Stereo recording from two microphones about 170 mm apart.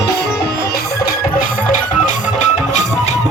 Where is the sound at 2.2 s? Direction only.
45° left (ahead or behind).